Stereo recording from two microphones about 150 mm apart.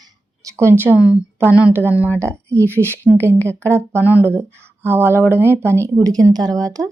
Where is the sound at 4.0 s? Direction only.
15° right (ahead or behind).